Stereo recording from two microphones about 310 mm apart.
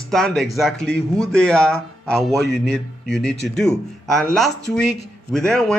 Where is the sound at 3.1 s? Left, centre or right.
Centre.